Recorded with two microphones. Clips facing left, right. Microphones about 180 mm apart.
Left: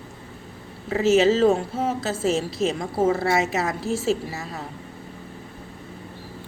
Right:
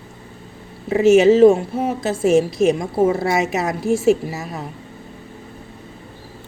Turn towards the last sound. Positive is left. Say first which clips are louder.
# right 5 dB
turn(degrees=-20)  # may be behind; listen again after turning